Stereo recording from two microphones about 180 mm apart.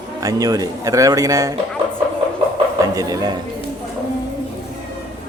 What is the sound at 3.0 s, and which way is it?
Speech, 20° right (ahead or behind).